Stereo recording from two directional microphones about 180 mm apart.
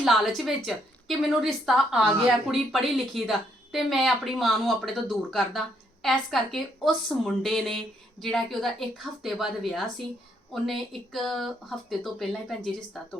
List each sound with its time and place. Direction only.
0.0 s a woman's voice: centre (ahead or behind)